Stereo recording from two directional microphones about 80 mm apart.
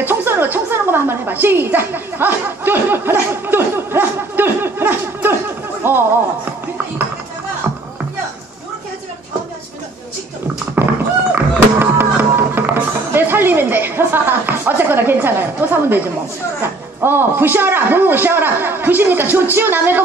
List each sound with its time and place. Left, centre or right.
0.0 s a woman's voice: right
10.8 s thunk: right
11.3 s music: right
17.0 s a woman's voice: right